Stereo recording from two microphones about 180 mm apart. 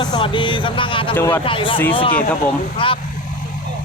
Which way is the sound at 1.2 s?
10° left (ahead or behind).